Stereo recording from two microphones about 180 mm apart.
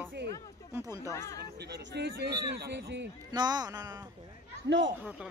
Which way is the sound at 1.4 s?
65° right (ahead or behind).